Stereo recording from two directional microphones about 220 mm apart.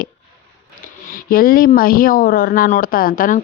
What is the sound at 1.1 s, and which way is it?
Speech, 40° left (ahead or behind).